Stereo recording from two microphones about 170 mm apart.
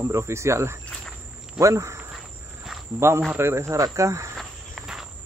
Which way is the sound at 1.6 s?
20° right (ahead or behind).